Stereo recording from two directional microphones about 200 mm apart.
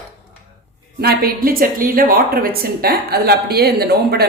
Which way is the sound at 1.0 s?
50° right (ahead or behind).